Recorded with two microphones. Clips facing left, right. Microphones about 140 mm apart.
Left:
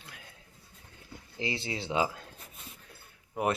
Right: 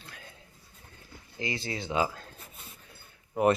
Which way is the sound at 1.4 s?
25° left (ahead or behind).